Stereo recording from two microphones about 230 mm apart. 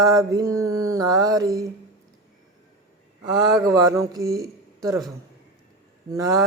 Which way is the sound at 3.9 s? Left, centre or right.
Centre.